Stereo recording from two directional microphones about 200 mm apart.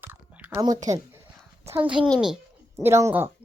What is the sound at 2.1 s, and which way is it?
Speech, 5° right (ahead or behind).